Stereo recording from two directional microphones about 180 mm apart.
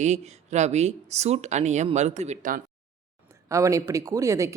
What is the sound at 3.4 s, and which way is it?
Speech, 15° right (ahead or behind).